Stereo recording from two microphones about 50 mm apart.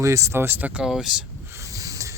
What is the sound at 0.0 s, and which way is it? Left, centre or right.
Speech, right.